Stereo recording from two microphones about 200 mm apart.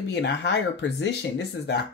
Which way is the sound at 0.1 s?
60° left (ahead or behind).